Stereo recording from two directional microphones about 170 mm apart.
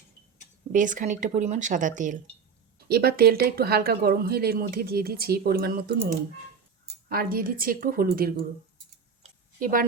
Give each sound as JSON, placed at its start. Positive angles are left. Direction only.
{"t": 0.7, "sound": "speech", "side_deg": -50}
{"t": 2.9, "sound": "speech", "side_deg": -65}
{"t": 7.1, "sound": "speech", "side_deg": -60}
{"t": 9.6, "sound": "a woman's voice", "side_deg": -55}